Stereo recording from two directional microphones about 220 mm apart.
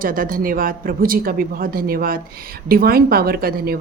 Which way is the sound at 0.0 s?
40° right (ahead or behind).